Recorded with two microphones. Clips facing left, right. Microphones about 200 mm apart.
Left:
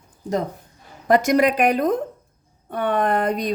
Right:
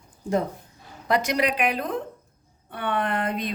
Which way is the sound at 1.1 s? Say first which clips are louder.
Left 7 dB; 45° left (ahead or behind).